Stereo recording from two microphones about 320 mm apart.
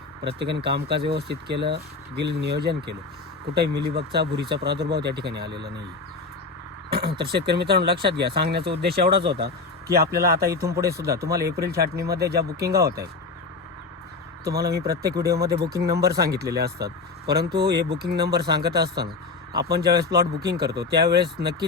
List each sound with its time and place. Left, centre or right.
0.3 s speech: right
6.9 s speech: right
10.9 s speech: centre
11.2 s speech: right
14.4 s speech: right